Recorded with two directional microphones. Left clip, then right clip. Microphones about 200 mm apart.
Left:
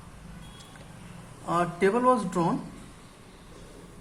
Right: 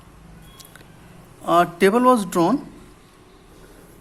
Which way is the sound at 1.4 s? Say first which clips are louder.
Right 9 dB; 50° right (ahead or behind).